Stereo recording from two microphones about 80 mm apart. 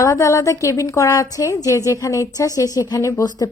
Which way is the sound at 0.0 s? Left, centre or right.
Left.